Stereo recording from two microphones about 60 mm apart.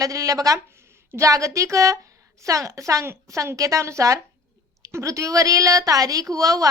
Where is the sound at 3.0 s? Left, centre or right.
Right.